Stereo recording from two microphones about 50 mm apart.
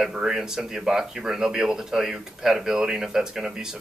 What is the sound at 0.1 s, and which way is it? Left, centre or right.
Speech, centre.